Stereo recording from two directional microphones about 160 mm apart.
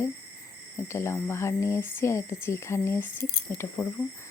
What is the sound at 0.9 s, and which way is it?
Speech, 15° left (ahead or behind).